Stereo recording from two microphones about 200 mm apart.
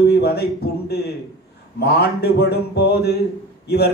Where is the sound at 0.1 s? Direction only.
55° left (ahead or behind).